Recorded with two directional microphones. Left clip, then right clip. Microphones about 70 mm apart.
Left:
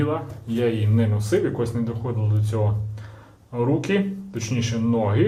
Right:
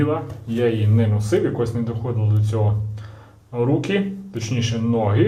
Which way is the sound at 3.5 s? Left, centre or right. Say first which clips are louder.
Right 2 dB; left.